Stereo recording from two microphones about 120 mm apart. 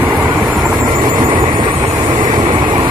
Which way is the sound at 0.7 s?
35° right (ahead or behind).